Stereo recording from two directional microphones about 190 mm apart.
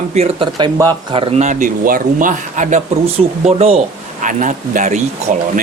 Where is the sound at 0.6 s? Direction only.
20° right (ahead or behind); by 5.0 s 40° right (ahead or behind).